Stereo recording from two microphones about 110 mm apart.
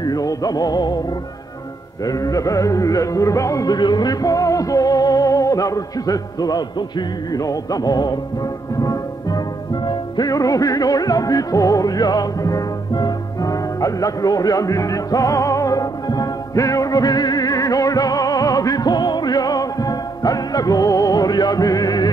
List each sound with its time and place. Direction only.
0.0 s music: 35° left (ahead or behind)
2.0 s music: 35° left (ahead or behind)